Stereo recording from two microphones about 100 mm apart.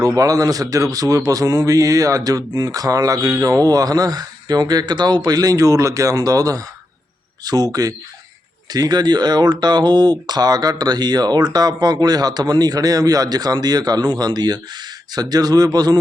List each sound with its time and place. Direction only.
0.0 s speech: 35° right (ahead or behind)